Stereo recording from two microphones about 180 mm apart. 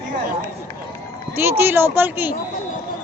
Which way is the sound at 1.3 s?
15° right (ahead or behind).